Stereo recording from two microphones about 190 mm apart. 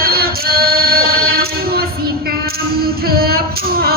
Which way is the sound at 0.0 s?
55° right (ahead or behind).